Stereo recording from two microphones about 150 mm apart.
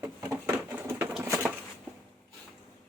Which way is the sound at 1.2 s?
20° right (ahead or behind).